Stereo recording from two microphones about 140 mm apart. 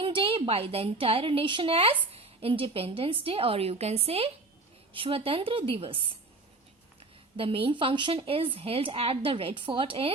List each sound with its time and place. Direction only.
0.0 s a woman's voice: 40° right (ahead or behind)
7.3 s speech: 40° right (ahead or behind)